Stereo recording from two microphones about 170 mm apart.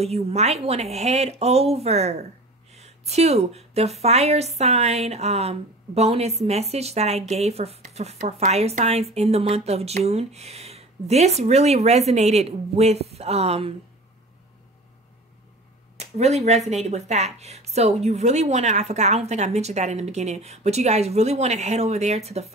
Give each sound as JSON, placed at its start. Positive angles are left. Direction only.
{"t": 0.0, "sound": "a woman's voice", "side_deg": -40}
{"t": 16.0, "sound": "a woman's voice", "side_deg": -40}